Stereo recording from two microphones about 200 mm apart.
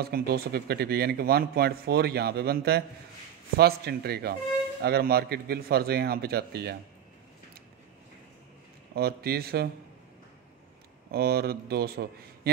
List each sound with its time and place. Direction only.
0.0 s speech: 50° right (ahead or behind)
8.9 s speech: 50° right (ahead or behind)
11.1 s speech: 50° right (ahead or behind)